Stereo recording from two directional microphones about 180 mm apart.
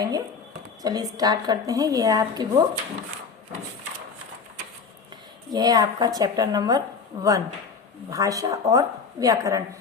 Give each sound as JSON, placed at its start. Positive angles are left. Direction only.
{"t": 0.8, "sound": "speech", "side_deg": -20}
{"t": 5.5, "sound": "a woman's voice", "side_deg": -20}